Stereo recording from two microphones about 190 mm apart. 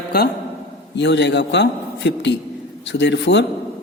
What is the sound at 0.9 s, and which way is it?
A man's voice, 65° left (ahead or behind).